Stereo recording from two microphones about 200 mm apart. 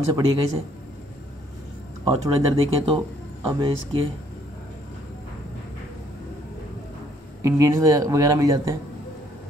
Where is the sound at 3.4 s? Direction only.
25° right (ahead or behind).